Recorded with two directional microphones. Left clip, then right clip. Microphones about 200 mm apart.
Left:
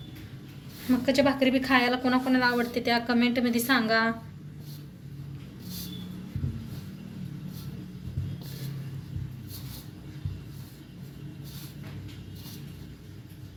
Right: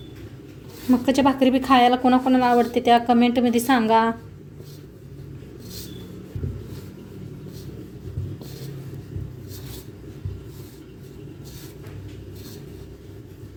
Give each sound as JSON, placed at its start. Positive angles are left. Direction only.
{"t": 1.0, "sound": "a woman's voice", "side_deg": -35}